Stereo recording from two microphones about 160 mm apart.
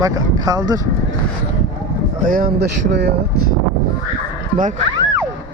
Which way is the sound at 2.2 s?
60° right (ahead or behind).